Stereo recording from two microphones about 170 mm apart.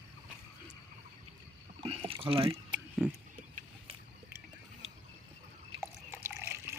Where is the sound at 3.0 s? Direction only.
10° right (ahead or behind).